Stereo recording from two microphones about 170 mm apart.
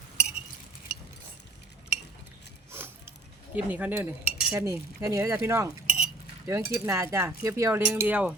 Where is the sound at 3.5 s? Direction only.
10° right (ahead or behind).